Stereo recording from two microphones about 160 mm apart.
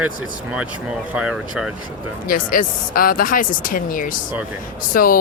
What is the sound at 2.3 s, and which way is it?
Speech, 60° left (ahead or behind).